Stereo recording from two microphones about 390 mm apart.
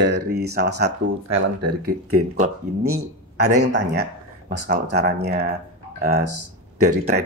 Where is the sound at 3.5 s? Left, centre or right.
Right.